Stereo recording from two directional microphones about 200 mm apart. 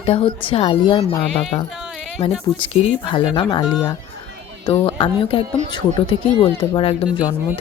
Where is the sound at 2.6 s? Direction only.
25° left (ahead or behind).